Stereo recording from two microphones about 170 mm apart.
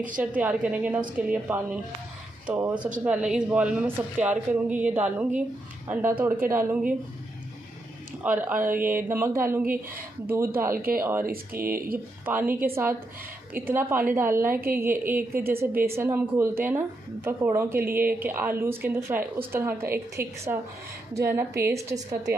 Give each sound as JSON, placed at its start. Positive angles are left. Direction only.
{"t": 0.4, "sound": "a woman's voice", "side_deg": -10}
{"t": 8.2, "sound": "a woman's voice", "side_deg": -10}
{"t": 11.6, "sound": "speech", "side_deg": -60}
{"t": 12.3, "sound": "a woman's voice", "side_deg": -10}